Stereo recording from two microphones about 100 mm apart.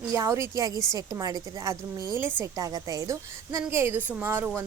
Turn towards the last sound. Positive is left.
turn(degrees=-20)  # may be behind; listen again after turning